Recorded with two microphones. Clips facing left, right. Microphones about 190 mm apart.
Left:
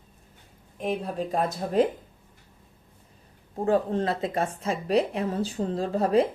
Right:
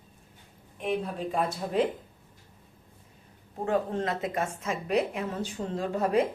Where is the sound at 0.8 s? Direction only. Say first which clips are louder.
Left 2 dB; 40° left (ahead or behind).